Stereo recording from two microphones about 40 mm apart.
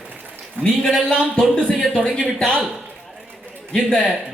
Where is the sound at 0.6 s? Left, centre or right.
Left.